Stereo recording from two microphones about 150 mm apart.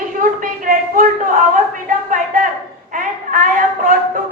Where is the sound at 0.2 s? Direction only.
65° right (ahead or behind).